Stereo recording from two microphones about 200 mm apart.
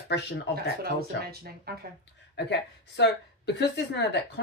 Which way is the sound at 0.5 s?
50° right (ahead or behind).